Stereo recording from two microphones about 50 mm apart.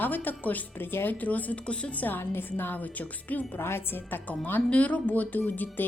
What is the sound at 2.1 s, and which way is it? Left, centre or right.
A woman's voice, left.